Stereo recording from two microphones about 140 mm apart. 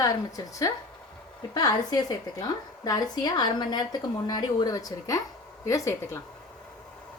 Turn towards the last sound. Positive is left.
turn(degrees=25)  # may be behind; listen again after turning